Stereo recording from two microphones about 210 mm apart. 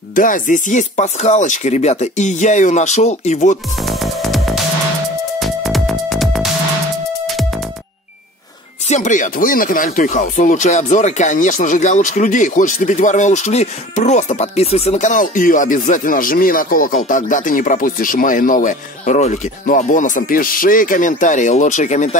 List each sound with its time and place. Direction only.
0.1 s speech: 40° left (ahead or behind)
3.8 s music: centre (ahead or behind)
8.8 s speech: 35° left (ahead or behind)